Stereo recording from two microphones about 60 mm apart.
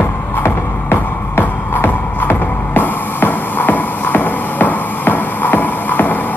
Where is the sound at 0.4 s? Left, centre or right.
Left.